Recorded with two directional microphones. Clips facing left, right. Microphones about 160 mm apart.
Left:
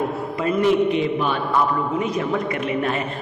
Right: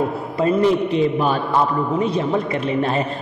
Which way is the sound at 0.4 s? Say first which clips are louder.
Right 2 dB; 35° right (ahead or behind).